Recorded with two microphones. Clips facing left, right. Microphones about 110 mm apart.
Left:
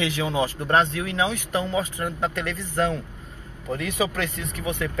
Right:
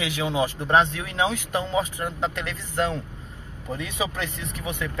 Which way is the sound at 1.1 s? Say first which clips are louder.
Right 1 dB; 25° right (ahead or behind).